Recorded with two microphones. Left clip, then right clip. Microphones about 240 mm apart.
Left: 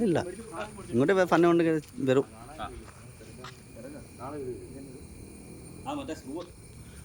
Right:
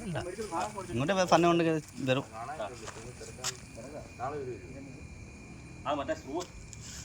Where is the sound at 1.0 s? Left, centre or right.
Centre.